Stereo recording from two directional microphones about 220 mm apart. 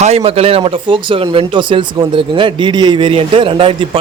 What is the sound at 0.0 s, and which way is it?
Speech, 25° right (ahead or behind).